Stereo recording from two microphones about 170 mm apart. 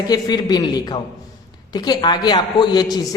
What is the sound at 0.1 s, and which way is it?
Speech, 25° left (ahead or behind).